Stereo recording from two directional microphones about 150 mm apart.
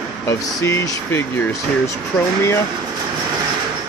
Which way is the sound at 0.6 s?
20° left (ahead or behind).